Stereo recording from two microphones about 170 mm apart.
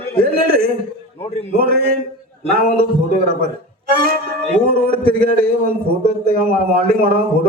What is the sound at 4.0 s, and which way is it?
Music, 60° right (ahead or behind).